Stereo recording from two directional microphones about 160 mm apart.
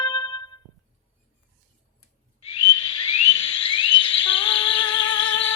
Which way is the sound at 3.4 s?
35° left (ahead or behind).